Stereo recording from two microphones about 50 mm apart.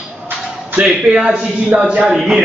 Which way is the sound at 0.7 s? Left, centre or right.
Centre.